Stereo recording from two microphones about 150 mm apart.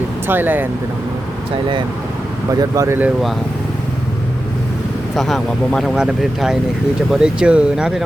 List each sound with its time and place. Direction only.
0.3 s speech: 10° right (ahead or behind)
2.5 s speech: 20° right (ahead or behind)
5.1 s speech: centre (ahead or behind)